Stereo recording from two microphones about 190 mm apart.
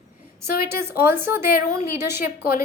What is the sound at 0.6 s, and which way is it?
A woman's voice, 15° right (ahead or behind).